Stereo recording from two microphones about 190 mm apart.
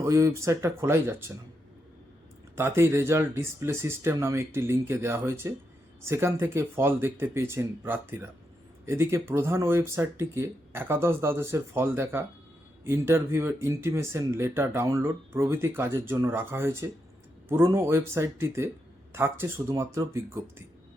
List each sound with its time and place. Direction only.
0.0 s speech: 15° right (ahead or behind)
2.6 s speech: 15° right (ahead or behind)